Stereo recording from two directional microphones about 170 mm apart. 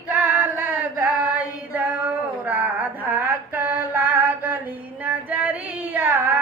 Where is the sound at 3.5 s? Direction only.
10° right (ahead or behind).